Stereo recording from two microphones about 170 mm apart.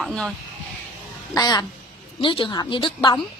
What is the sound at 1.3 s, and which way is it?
A woman's voice, 20° left (ahead or behind).